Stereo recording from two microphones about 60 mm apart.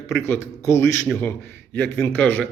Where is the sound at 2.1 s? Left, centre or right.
Left.